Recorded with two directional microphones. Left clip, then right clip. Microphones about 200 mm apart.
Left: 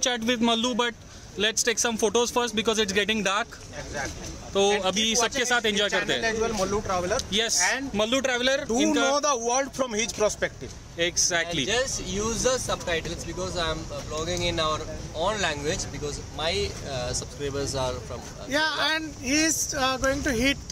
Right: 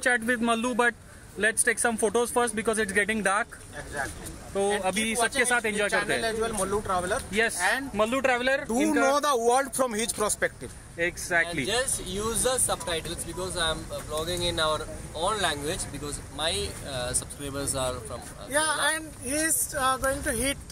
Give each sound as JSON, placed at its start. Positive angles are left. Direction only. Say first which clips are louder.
{"t": 0.0, "sound": "speech", "louder": "even", "side_deg": 5}
{"t": 4.8, "sound": "speech", "louder": "left 2 dB", "side_deg": 10}
{"t": 6.2, "sound": "speech", "louder": "left 2 dB", "side_deg": -10}
{"t": 7.9, "sound": "speech", "louder": "even", "side_deg": 10}
{"t": 8.6, "sound": "speech", "louder": "left 1 dB", "side_deg": -25}
{"t": 11.2, "sound": "speech", "louder": "even", "side_deg": 5}
{"t": 18.5, "sound": "speech", "louder": "left 1 dB", "side_deg": 45}